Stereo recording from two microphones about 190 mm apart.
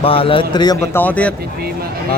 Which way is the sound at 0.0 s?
30° left (ahead or behind).